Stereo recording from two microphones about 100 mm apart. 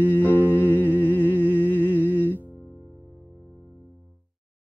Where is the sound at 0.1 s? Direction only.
15° left (ahead or behind).